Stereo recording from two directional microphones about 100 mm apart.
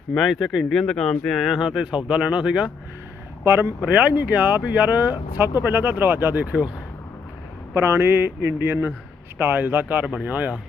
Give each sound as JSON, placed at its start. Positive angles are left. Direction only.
{"t": 0.1, "sound": "speech", "side_deg": 0}
{"t": 3.4, "sound": "speech", "side_deg": -20}
{"t": 7.7, "sound": "speech", "side_deg": -25}